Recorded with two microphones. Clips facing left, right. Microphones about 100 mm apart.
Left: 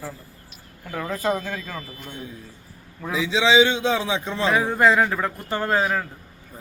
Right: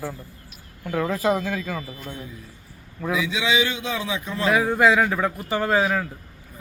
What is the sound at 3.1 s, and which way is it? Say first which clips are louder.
A man's voice: left 3 dB; 25° left (ahead or behind).